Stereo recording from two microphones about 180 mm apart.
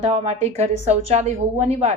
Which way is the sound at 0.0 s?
35° right (ahead or behind).